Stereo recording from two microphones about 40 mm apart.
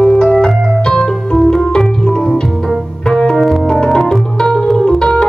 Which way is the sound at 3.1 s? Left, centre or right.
Centre.